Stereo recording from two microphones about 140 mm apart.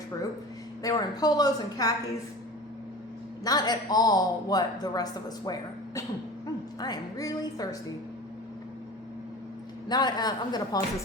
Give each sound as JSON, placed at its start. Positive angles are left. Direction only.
{"t": 0.8, "sound": "speech", "side_deg": 25}
{"t": 3.4, "sound": "speech", "side_deg": 25}
{"t": 9.9, "sound": "speech", "side_deg": 30}